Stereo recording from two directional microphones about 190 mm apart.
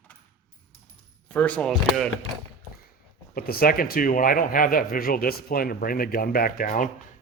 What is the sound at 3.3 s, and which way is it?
Speech, 50° left (ahead or behind).